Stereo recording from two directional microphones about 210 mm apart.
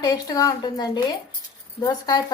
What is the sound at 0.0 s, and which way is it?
A woman's voice, 15° left (ahead or behind).